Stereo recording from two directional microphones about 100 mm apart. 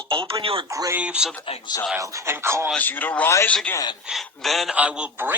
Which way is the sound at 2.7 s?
20° left (ahead or behind).